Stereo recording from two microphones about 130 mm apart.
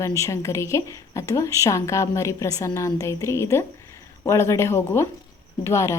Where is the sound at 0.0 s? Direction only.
25° left (ahead or behind).